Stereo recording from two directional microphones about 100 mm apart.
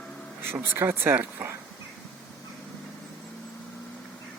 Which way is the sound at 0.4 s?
20° right (ahead or behind).